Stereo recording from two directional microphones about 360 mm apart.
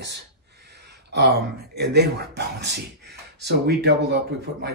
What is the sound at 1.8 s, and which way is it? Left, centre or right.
Speech, right.